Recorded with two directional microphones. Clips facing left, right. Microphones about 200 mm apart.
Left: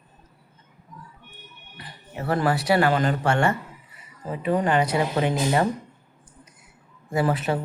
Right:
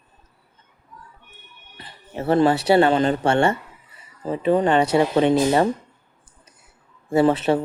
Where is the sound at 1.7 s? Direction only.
25° right (ahead or behind).